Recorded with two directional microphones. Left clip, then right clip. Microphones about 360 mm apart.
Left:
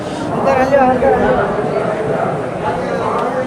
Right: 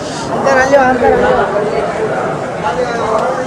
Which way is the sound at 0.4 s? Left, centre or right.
Right.